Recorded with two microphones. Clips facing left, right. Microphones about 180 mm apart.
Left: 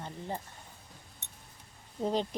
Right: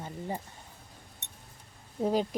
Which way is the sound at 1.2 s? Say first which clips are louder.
Right 2 dB; 65° right (ahead or behind).